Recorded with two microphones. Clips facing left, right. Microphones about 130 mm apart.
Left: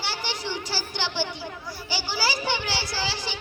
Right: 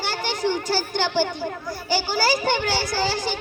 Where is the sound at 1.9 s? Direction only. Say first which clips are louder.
Right 7 dB; 50° right (ahead or behind).